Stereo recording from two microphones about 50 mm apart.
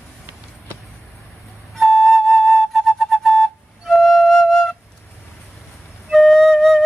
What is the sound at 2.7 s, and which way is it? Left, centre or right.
Flute, centre.